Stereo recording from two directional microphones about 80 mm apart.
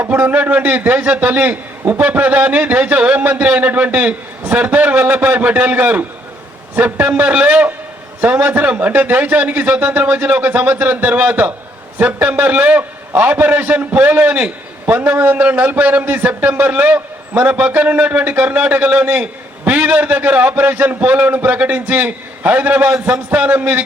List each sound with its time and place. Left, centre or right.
0.0 s a man's voice: right